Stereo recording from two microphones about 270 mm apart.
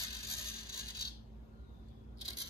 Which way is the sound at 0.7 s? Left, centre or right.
Left.